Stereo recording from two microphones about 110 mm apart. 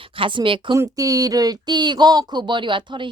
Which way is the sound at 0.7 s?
30° right (ahead or behind).